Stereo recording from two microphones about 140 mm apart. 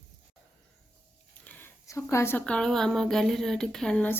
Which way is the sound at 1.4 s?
10° left (ahead or behind).